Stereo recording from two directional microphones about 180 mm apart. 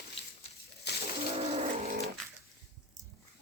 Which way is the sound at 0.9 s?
65° left (ahead or behind).